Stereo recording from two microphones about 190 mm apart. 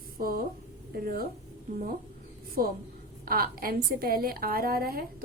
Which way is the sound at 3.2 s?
50° right (ahead or behind).